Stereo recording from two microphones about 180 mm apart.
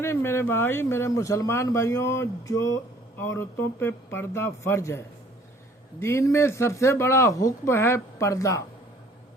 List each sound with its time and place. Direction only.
0.0 s speech: 15° left (ahead or behind)